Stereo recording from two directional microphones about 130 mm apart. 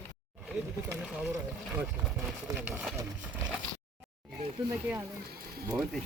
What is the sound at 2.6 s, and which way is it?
Speech, 10° right (ahead or behind).